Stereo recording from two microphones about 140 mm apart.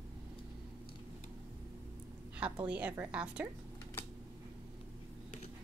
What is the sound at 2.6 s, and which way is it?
Speech, 10° right (ahead or behind).